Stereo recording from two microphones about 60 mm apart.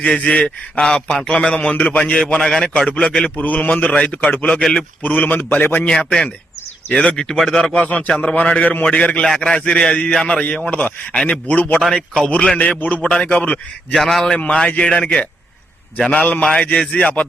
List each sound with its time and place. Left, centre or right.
0.0 s a man's voice: centre
4.5 s a man's voice: centre
5.0 s a man's voice: left
5.9 s a man's voice: centre
7.6 s a man's voice: centre
9.2 s a man's voice: centre
11.9 s a man's voice: centre
12.5 s a man's voice: left
13.9 s a man's voice: centre
14.3 s a man's voice: centre